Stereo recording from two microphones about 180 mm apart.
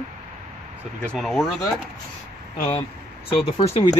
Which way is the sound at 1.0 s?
Centre (ahead or behind).